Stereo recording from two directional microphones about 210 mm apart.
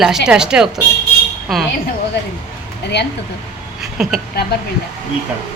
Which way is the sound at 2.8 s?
55° left (ahead or behind).